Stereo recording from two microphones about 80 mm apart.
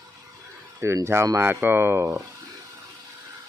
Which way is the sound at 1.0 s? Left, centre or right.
Right.